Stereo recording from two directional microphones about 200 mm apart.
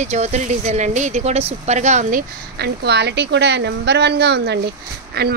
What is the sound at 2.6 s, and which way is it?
A woman's voice, 55° right (ahead or behind).